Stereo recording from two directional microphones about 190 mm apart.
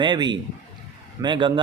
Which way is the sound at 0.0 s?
25° right (ahead or behind).